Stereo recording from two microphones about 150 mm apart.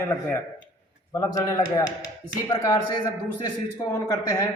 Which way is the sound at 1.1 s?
25° left (ahead or behind).